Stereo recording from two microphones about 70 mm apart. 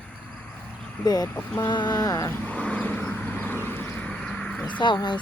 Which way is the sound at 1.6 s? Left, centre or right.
Left.